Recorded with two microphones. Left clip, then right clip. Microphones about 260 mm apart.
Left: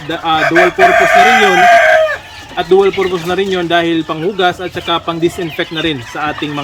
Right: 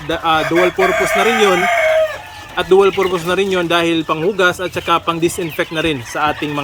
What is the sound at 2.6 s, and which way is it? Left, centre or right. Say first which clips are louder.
Speech: left 1 dB; centre.